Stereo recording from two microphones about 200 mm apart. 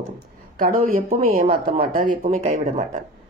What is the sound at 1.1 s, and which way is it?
Speech, 50° right (ahead or behind).